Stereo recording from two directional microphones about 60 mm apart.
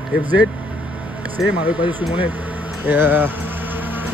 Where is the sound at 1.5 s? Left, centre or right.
Right.